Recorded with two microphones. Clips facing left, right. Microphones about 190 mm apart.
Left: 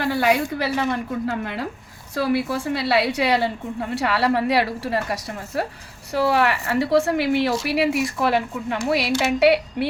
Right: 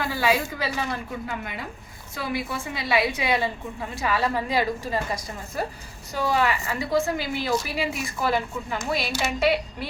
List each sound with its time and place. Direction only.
0.0 s a woman's voice: 75° left (ahead or behind)